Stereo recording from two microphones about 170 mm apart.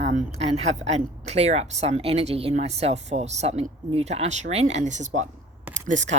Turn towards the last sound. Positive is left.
turn(degrees=-45)  # may be behind; listen again after turning